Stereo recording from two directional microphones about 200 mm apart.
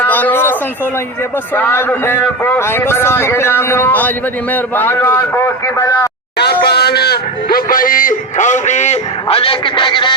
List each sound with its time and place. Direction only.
0.0 s a sound: 10° left (ahead or behind)
1.5 s a man's voice: 10° left (ahead or behind)
6.4 s a man's voice: 55° left (ahead or behind); by 10.2 s 25° left (ahead or behind)